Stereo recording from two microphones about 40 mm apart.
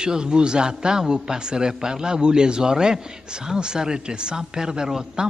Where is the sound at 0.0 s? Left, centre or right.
Centre.